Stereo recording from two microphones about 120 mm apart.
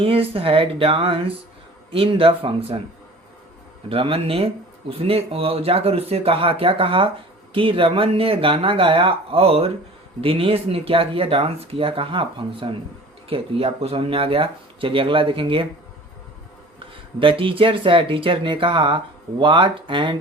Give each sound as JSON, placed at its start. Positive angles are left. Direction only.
{"t": 0.0, "sound": "speech", "side_deg": -50}
{"t": 3.8, "sound": "speech", "side_deg": -50}
{"t": 16.9, "sound": "speech", "side_deg": -45}